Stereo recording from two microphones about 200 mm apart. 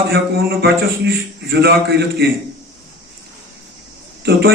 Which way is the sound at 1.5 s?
55° right (ahead or behind).